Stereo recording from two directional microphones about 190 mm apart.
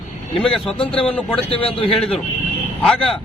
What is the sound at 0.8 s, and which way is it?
Speech, 30° left (ahead or behind).